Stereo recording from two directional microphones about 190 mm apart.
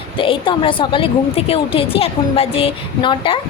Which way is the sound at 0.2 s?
25° left (ahead or behind).